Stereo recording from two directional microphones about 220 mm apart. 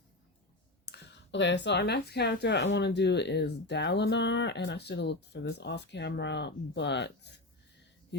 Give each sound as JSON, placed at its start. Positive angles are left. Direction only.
{"t": 0.9, "sound": "speech", "side_deg": 50}